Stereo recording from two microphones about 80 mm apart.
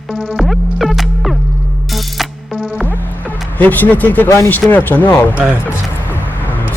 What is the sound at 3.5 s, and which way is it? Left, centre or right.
Speech, left.